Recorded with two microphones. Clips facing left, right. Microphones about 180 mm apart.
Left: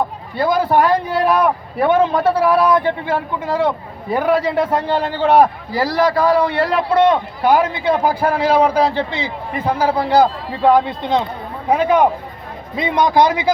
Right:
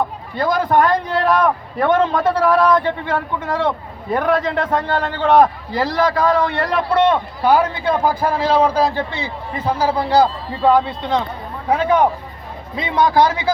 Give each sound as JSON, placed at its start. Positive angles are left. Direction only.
{"t": 0.3, "sound": "a man's voice", "side_deg": 10}